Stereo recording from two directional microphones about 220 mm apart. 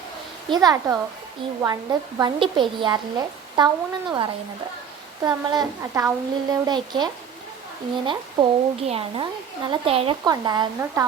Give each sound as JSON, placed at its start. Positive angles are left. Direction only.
{"t": 0.5, "sound": "a woman's voice", "side_deg": -15}